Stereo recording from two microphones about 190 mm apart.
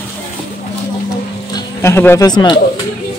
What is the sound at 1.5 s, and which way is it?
Speech, 15° left (ahead or behind).